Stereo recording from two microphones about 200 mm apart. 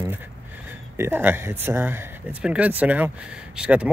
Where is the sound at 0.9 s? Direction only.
10° right (ahead or behind).